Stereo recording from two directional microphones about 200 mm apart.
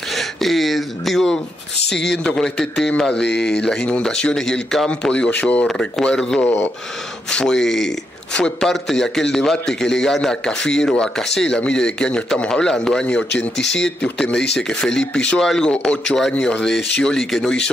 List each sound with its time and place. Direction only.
0.1 s a sound: centre (ahead or behind)
1.9 s speech: 60° left (ahead or behind)
2.2 s a man's voice: centre (ahead or behind)
3.2 s speech: 60° left (ahead or behind)
3.6 s a man's voice: 5° left (ahead or behind)
13.6 s speech: 60° left (ahead or behind)
13.8 s a man's voice: 5° left (ahead or behind)